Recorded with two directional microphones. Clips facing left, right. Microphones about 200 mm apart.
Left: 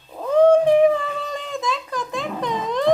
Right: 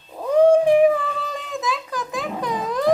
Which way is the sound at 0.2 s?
10° right (ahead or behind).